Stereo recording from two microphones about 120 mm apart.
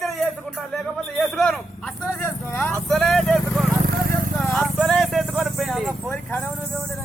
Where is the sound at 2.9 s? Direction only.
5° left (ahead or behind).